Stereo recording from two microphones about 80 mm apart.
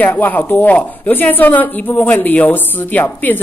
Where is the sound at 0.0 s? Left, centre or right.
Left.